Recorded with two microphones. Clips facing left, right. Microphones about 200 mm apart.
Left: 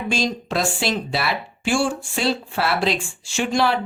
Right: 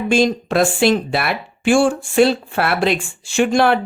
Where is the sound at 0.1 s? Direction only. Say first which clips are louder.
Right 8 dB; 55° right (ahead or behind).